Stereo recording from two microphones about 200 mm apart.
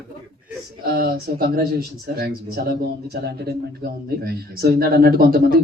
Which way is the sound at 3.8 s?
50° right (ahead or behind).